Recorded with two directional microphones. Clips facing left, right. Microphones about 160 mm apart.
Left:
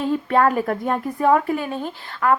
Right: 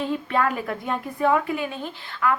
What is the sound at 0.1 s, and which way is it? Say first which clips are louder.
A woman's voice: left 5 dB; 40° left (ahead or behind).